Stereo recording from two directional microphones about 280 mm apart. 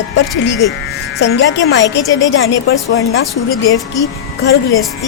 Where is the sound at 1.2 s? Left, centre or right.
Left.